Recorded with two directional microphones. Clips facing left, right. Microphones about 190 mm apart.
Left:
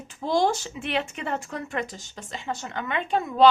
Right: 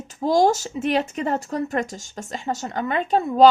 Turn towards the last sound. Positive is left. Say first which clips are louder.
# right 5 dB
turn(degrees=-35)  # may be behind; listen again after turning